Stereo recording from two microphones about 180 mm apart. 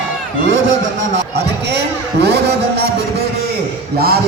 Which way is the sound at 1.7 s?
65° right (ahead or behind).